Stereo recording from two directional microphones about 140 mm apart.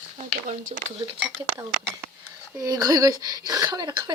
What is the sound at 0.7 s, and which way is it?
Speech, 40° right (ahead or behind).